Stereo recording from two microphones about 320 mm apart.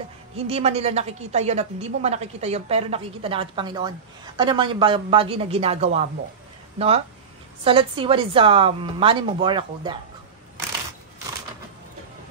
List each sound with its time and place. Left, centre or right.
0.4 s a woman's voice: centre
7.6 s a woman's voice: centre